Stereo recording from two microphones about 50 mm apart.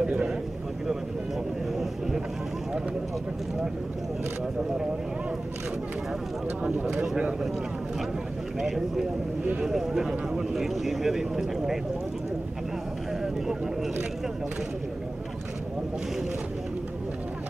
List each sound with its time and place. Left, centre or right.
0.0 s a sound: centre
1.8 s vehicle: centre
6.6 s speech: centre
8.5 s speech: centre